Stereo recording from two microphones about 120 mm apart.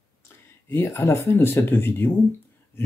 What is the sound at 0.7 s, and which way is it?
Speech, 20° left (ahead or behind).